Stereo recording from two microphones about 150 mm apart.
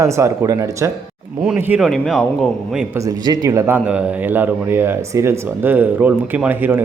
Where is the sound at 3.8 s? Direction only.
10° right (ahead or behind).